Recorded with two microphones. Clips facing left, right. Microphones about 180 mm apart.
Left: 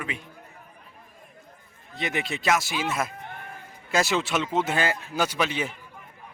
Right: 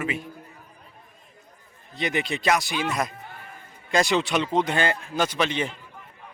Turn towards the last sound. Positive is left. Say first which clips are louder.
# right 2 dB
turn(degrees=5)  # may be behind; listen again after turning